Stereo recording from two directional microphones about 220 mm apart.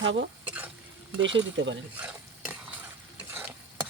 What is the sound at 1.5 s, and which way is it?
Speech, 55° right (ahead or behind).